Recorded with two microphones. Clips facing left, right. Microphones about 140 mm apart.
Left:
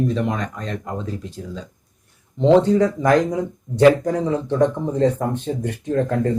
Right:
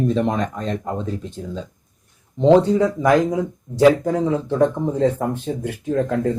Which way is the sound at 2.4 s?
10° right (ahead or behind).